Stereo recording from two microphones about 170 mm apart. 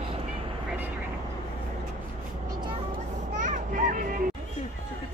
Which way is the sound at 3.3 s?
50° right (ahead or behind).